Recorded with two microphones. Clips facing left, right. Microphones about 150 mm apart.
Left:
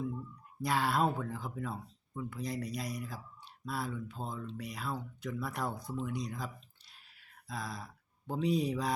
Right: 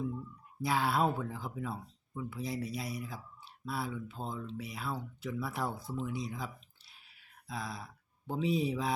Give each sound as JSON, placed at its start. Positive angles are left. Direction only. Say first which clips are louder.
{"t": 0.6, "sound": "speech", "louder": "even", "side_deg": 0}